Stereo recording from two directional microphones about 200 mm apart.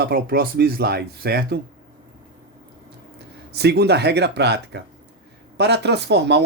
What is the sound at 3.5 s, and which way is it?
Speech, 55° right (ahead or behind).